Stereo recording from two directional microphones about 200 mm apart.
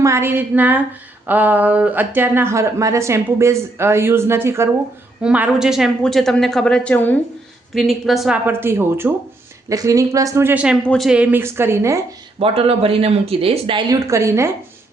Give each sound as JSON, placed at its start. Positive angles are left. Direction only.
{"t": 0.0, "sound": "a woman's voice", "side_deg": -15}
{"t": 12.4, "sound": "speech", "side_deg": -30}
{"t": 14.1, "sound": "speech", "side_deg": -15}